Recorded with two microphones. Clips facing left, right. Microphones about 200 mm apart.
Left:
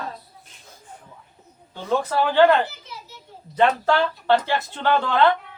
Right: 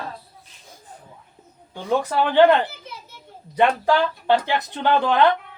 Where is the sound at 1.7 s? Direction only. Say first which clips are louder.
Right 1 dB; 15° right (ahead or behind).